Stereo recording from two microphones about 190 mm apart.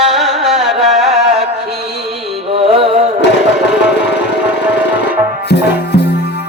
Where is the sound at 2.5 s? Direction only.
30° right (ahead or behind).